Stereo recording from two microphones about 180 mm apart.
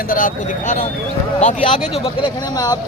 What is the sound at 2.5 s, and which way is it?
Speech, 20° left (ahead or behind).